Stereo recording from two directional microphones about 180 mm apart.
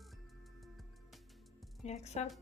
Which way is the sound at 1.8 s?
40° left (ahead or behind).